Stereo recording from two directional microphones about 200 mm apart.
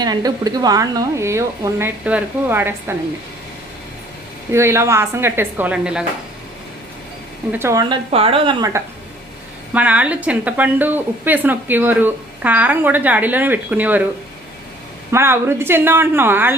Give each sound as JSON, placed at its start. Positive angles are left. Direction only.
{"t": 0.0, "sound": "a woman's voice", "side_deg": -20}
{"t": 4.5, "sound": "a woman's voice", "side_deg": -15}
{"t": 7.5, "sound": "a woman's voice", "side_deg": -15}
{"t": 8.1, "sound": "a woman's voice", "side_deg": -30}
{"t": 8.7, "sound": "a woman's voice", "side_deg": -15}
{"t": 15.1, "sound": "a woman's voice", "side_deg": -10}